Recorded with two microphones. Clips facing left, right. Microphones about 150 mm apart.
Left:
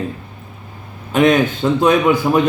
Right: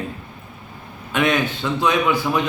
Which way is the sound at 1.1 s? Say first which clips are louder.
Left 7 dB; 40° left (ahead or behind).